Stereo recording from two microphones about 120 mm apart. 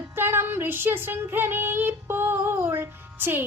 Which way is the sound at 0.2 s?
20° right (ahead or behind).